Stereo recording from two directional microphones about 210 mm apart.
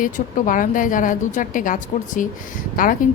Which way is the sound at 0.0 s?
40° left (ahead or behind).